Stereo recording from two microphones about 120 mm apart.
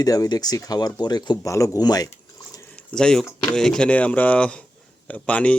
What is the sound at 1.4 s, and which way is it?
Speech, 25° left (ahead or behind).